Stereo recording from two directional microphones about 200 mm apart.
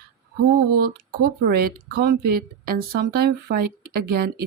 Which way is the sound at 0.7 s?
45° right (ahead or behind).